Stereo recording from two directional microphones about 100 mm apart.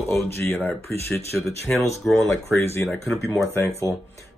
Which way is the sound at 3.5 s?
25° left (ahead or behind).